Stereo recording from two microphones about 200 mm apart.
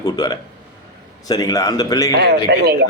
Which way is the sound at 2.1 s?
55° right (ahead or behind).